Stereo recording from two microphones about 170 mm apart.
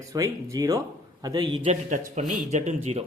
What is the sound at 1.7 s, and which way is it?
Speech, 45° right (ahead or behind).